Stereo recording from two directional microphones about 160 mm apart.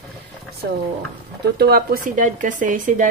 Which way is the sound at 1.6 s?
75° right (ahead or behind).